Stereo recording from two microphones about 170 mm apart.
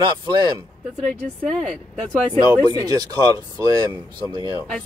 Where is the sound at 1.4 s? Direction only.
5° left (ahead or behind).